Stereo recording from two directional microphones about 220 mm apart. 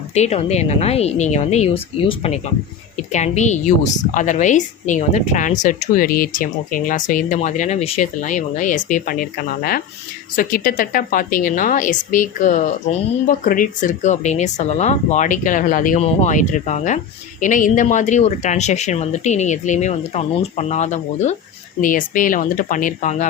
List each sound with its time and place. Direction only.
0.1 s a woman's voice: 30° left (ahead or behind)